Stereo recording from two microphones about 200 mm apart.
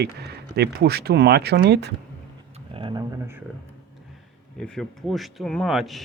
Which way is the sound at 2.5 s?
25° right (ahead or behind).